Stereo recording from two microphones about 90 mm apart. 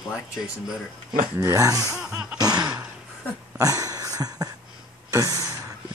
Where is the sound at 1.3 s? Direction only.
40° right (ahead or behind).